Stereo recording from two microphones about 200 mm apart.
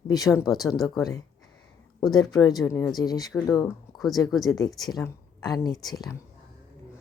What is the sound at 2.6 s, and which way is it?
Speech, 5° left (ahead or behind).